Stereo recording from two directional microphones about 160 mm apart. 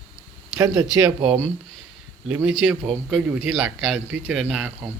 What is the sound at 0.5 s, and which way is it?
Speech, 20° right (ahead or behind).